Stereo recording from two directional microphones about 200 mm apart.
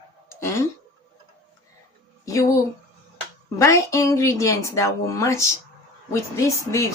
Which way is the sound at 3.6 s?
15° left (ahead or behind).